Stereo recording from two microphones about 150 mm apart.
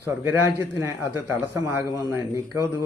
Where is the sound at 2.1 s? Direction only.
15° right (ahead or behind).